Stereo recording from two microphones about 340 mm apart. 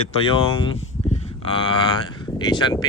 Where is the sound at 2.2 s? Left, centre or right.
Centre.